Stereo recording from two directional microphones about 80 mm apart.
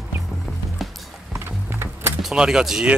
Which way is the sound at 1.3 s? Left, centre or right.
Right.